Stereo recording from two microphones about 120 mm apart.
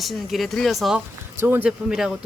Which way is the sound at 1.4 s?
15° right (ahead or behind).